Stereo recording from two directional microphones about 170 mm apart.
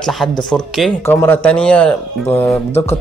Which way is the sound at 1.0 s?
15° left (ahead or behind).